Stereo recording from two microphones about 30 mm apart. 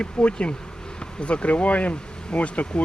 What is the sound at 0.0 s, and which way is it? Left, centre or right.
Speech, left.